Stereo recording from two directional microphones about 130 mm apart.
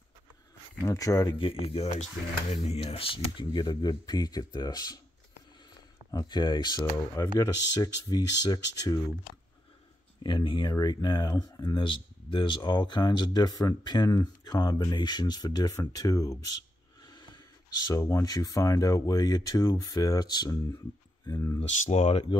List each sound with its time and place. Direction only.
0.8 s speech: 25° left (ahead or behind)
1.5 s speech: 45° left (ahead or behind); by 5.0 s 30° left (ahead or behind)
6.1 s speech: 35° left (ahead or behind)
10.2 s speech: 35° left (ahead or behind)
17.1 s snort: 35° left (ahead or behind)
17.8 s speech: 25° left (ahead or behind)
21.5 s speech: 60° left (ahead or behind)